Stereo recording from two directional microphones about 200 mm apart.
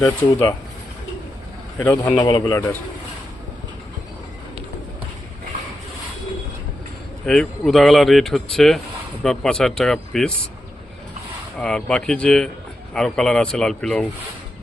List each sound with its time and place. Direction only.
0.0 s speech: 10° left (ahead or behind)
1.8 s speech: 10° left (ahead or behind)
2.2 s a man's voice: 20° left (ahead or behind)
7.3 s speech: 5° left (ahead or behind)
11.6 s speech: 5° left (ahead or behind)